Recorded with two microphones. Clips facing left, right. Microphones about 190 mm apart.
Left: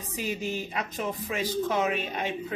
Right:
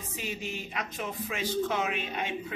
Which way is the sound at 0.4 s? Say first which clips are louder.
Left 5 dB; 40° left (ahead or behind).